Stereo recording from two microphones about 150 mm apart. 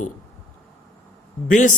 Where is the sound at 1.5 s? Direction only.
60° left (ahead or behind).